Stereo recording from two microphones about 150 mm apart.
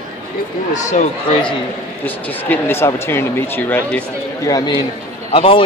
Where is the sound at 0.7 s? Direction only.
55° left (ahead or behind).